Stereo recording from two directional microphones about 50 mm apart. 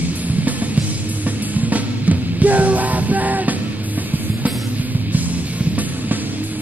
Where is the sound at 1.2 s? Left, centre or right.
Right.